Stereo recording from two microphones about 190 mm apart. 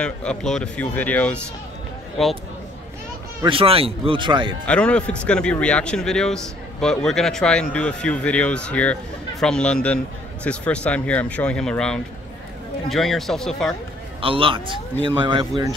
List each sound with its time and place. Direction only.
0.0 s speech: 5° left (ahead or behind)
3.4 s a man's voice: 30° right (ahead or behind)
4.6 s speech: 5° left (ahead or behind)
14.2 s a man's voice: 25° right (ahead or behind)